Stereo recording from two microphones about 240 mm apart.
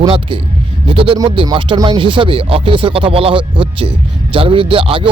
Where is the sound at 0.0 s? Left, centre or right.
Right.